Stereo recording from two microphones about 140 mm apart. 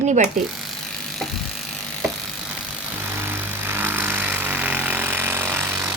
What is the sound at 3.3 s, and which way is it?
Vehicle, 15° right (ahead or behind).